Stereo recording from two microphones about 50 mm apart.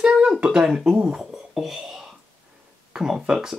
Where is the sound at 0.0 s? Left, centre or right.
Centre.